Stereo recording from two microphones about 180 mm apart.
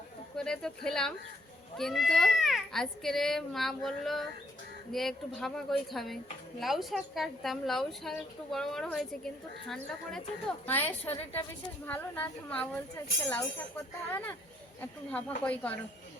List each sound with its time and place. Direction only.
0.3 s speech: 5° left (ahead or behind)